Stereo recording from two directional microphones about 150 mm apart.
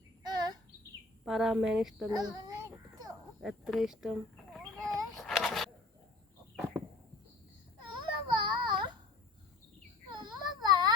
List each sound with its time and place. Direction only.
0.2 s bird: 25° right (ahead or behind)
1.2 s speech: 5° right (ahead or behind)
2.0 s babbling: 25° right (ahead or behind)
3.4 s a sound: 5° right (ahead or behind)
7.9 s baby cry: 30° right (ahead or behind)
10.1 s baby cry: 30° right (ahead or behind)